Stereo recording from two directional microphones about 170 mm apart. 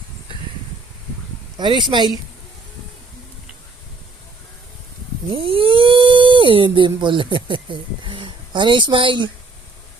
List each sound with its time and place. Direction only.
1.5 s speech: 30° right (ahead or behind)
5.3 s speech: 30° right (ahead or behind)